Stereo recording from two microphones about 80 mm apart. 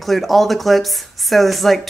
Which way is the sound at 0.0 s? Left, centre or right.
Centre.